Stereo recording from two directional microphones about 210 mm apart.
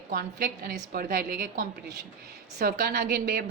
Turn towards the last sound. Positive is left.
turn(degrees=-45)  # may be behind; listen again after turning